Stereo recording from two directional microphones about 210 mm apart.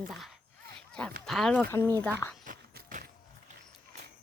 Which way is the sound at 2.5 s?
40° right (ahead or behind).